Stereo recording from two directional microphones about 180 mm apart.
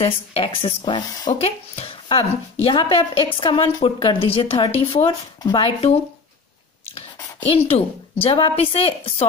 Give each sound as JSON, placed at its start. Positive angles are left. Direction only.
{"t": 0.0, "sound": "a woman's voice", "side_deg": 35}